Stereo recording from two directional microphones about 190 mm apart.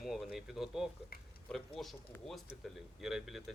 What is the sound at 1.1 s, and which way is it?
Speech, 50° left (ahead or behind).